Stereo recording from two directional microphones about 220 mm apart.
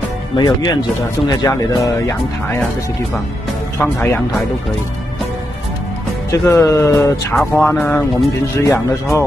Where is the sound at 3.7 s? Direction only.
10° left (ahead or behind).